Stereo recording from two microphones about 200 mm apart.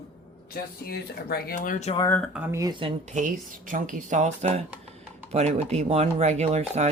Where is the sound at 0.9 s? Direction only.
50° left (ahead or behind); by 2.0 s 35° left (ahead or behind).